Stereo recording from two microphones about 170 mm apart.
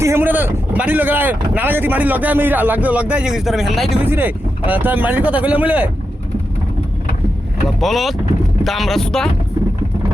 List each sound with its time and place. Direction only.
0.0 s speech: 15° right (ahead or behind)
4.0 s speech: 10° right (ahead or behind)
7.8 s speech: centre (ahead or behind)